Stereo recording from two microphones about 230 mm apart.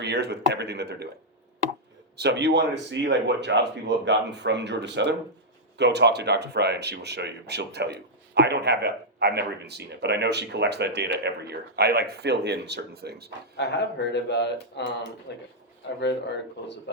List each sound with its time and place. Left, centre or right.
0.0 s speech: right
2.1 s speech: right
13.6 s speech: left